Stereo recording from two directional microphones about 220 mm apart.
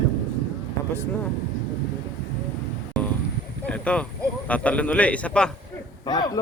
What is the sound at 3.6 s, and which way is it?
A man's voice, 5° left (ahead or behind).